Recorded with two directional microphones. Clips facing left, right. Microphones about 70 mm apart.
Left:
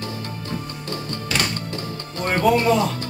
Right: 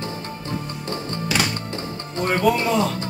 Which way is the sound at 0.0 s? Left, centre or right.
Right.